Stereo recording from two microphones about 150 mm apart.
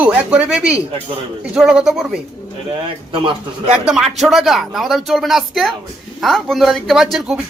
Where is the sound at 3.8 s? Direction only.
5° right (ahead or behind).